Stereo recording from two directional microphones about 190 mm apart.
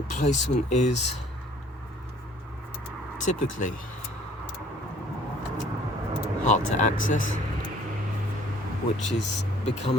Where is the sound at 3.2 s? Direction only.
40° left (ahead or behind).